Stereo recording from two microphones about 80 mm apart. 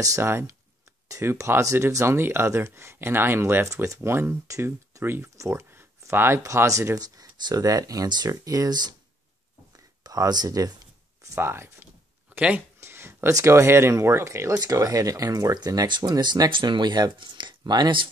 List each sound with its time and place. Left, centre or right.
0.0 s speech: right
3.6 s speech: right
5.5 s a sound: right
6.4 s speech: right
7.0 s speech: right
10.0 s a sound: right
11.3 s speech: right
12.8 s speech: right
14.6 s speech: right
16.0 s speech: right